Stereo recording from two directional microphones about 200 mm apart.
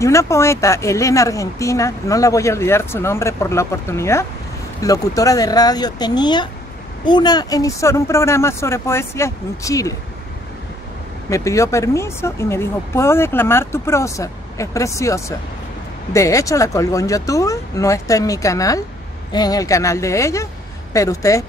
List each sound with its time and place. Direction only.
0.0 s speech: 15° left (ahead or behind)
11.2 s speech: 15° left (ahead or behind)